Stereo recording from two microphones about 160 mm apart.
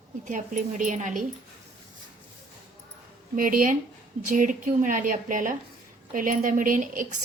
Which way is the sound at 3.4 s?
60° right (ahead or behind).